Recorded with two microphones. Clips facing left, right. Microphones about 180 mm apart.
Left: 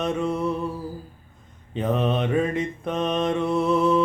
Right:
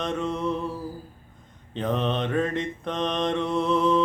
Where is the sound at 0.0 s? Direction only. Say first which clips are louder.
Left 3 dB; 10° left (ahead or behind).